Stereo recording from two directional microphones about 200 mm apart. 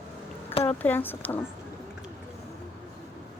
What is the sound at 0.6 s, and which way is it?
Speech, 10° left (ahead or behind).